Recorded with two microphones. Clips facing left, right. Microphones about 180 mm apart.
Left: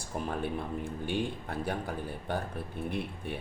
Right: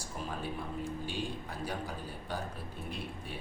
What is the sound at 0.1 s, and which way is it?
Speech, 55° left (ahead or behind).